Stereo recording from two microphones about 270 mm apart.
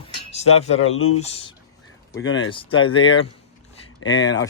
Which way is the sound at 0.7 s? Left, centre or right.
Left.